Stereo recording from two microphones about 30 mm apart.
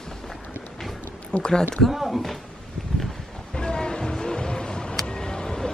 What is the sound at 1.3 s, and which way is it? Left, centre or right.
Speech, left.